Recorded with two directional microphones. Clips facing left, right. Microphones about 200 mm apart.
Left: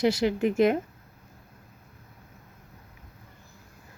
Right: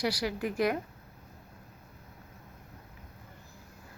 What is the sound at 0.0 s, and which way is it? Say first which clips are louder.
Speech: left 8 dB; 25° left (ahead or behind).